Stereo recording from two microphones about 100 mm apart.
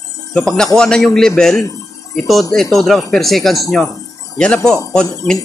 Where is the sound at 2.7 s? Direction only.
5° left (ahead or behind).